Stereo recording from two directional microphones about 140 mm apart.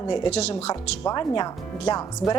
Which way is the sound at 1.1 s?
30° left (ahead or behind).